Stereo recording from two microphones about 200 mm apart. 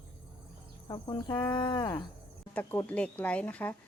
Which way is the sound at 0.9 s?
25° left (ahead or behind).